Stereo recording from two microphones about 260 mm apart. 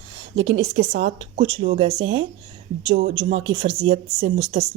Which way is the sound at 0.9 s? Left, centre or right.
Right.